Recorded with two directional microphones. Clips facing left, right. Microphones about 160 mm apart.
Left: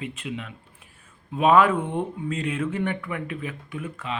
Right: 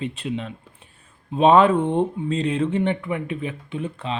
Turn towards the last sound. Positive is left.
turn(degrees=-30)  # may be behind; listen again after turning